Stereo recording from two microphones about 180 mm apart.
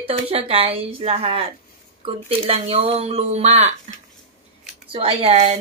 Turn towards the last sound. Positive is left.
turn(degrees=-35)  # may be behind; listen again after turning